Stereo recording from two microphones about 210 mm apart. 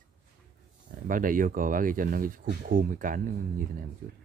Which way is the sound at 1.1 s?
40° right (ahead or behind).